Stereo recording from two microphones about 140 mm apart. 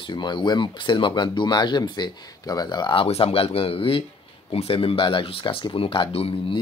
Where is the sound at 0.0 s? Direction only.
35° left (ahead or behind).